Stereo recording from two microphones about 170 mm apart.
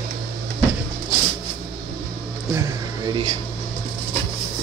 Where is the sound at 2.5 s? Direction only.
20° right (ahead or behind).